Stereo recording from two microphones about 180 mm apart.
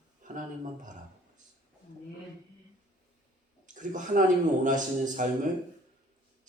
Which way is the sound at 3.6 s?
45° right (ahead or behind).